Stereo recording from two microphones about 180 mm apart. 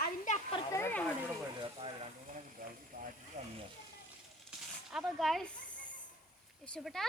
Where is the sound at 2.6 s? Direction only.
50° right (ahead or behind).